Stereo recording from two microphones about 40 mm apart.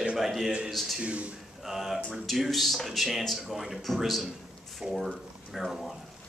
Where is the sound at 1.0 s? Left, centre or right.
Right.